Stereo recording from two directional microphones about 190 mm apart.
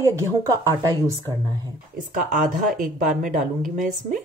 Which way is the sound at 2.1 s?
45° right (ahead or behind).